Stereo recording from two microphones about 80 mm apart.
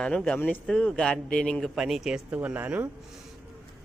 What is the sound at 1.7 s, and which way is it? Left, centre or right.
Speech, centre.